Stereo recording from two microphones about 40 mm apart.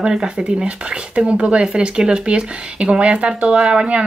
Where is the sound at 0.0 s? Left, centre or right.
Centre.